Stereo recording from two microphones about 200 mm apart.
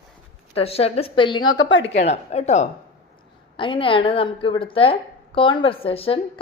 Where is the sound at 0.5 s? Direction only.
30° left (ahead or behind).